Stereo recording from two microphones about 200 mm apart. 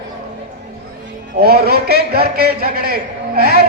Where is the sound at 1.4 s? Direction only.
50° right (ahead or behind).